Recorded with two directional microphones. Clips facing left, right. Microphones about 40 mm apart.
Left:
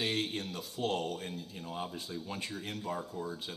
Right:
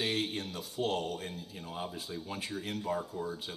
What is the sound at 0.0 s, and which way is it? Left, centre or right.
A man's voice, centre.